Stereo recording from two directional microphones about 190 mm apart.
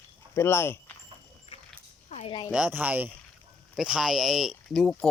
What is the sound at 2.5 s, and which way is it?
Speech, 5° right (ahead or behind).